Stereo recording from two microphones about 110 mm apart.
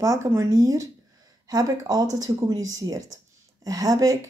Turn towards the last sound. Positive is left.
turn(degrees=-30)  # may be behind; listen again after turning